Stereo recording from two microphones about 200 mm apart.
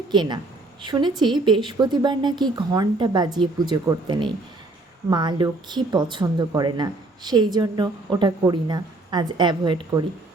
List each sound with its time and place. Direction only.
0.1 s speech: 20° right (ahead or behind)